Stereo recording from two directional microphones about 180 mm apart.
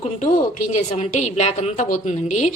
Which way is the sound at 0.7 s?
40° left (ahead or behind).